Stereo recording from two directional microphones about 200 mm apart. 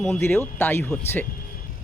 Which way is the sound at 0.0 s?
5° left (ahead or behind).